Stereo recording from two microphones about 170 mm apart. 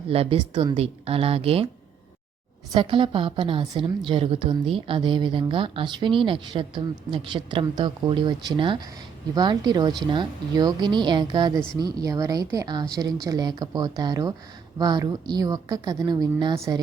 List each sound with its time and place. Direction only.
0.1 s a woman's voice: 35° right (ahead or behind)
2.7 s a woman's voice: 30° right (ahead or behind)